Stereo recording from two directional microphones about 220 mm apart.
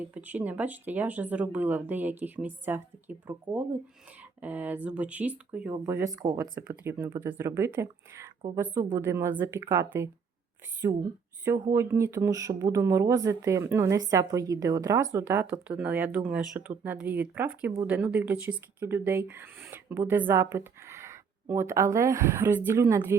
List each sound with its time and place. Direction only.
0.0 s speech: 10° right (ahead or behind)